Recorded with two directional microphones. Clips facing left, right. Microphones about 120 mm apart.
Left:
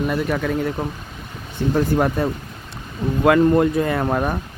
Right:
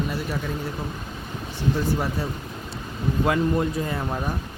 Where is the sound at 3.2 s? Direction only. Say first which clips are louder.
Left 9 dB; 70° left (ahead or behind).